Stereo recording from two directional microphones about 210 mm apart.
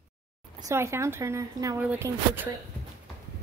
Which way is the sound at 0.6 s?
10° right (ahead or behind).